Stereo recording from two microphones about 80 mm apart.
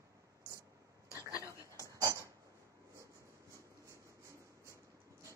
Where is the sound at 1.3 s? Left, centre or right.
Left.